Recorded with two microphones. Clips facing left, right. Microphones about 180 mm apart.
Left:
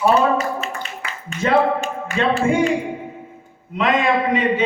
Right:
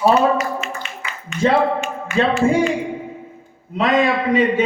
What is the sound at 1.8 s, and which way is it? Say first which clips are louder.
Speech: right 3 dB; 35° left (ahead or behind).